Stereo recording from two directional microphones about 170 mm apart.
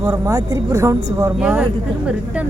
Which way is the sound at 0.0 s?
20° right (ahead or behind).